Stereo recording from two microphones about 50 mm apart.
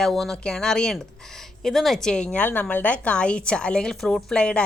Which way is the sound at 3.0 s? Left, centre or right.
Left.